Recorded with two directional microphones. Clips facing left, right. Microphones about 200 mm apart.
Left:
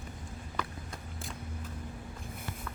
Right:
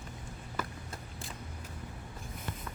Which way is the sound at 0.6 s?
Centre (ahead or behind).